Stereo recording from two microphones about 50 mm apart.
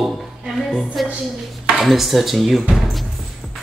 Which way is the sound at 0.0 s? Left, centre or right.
Centre.